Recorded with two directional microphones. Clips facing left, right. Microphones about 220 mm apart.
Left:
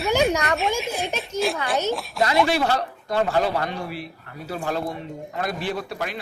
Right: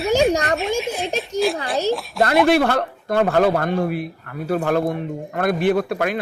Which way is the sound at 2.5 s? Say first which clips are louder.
Right 6 dB; 55° right (ahead or behind).